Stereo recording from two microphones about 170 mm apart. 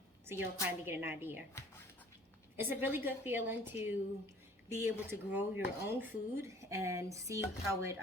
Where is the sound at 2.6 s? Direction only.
10° right (ahead or behind).